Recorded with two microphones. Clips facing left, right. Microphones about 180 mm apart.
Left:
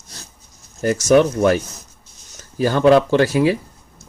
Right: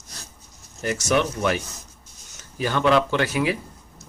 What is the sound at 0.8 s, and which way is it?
Speech, 40° left (ahead or behind).